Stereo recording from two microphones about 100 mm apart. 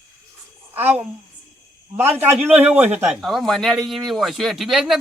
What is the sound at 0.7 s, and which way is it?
A woman's voice, 20° right (ahead or behind).